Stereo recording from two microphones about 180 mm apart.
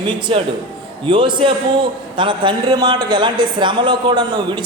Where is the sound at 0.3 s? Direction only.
30° right (ahead or behind).